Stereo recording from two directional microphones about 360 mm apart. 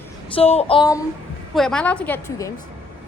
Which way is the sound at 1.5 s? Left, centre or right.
Centre.